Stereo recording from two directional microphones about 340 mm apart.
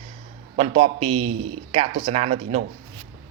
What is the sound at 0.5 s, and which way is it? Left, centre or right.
Speech, centre.